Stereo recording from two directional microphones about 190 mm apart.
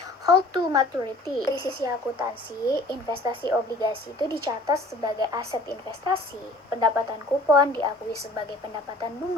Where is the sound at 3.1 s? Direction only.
25° right (ahead or behind).